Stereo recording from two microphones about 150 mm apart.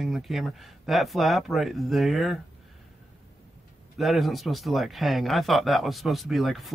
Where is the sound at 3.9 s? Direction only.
Centre (ahead or behind).